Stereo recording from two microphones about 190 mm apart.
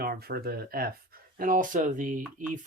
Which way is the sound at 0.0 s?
50° right (ahead or behind).